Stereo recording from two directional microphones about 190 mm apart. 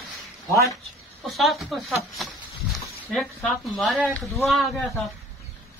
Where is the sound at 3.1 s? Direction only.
Centre (ahead or behind).